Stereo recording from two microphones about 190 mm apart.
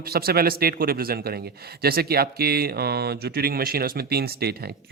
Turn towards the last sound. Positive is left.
turn(degrees=-55)  # may be behind; listen again after turning